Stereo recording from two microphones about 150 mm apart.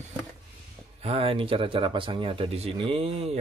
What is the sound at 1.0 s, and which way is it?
Speech, 40° right (ahead or behind).